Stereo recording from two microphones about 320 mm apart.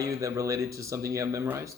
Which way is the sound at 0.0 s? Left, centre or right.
Centre.